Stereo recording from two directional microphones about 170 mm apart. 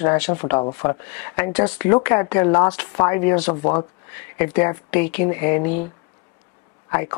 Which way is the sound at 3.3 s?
30° left (ahead or behind).